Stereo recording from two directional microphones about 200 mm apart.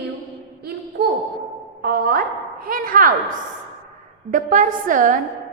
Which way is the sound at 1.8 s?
45° right (ahead or behind).